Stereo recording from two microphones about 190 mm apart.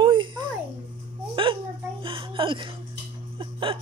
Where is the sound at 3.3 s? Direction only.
25° right (ahead or behind).